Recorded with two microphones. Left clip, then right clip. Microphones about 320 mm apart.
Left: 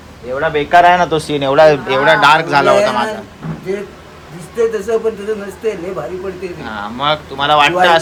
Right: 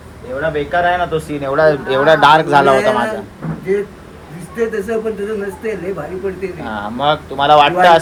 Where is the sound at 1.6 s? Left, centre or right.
Left.